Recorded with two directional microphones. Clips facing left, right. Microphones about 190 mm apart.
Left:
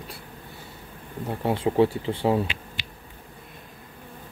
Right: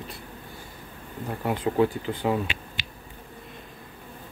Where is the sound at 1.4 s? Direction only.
25° left (ahead or behind).